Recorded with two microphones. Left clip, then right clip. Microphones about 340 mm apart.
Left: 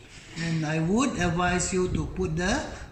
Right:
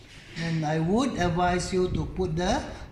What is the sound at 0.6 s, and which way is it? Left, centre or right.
A man's voice, centre.